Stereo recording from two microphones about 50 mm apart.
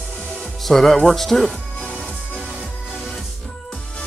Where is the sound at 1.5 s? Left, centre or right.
Left.